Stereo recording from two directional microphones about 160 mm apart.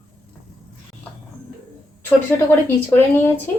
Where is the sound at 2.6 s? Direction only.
10° left (ahead or behind).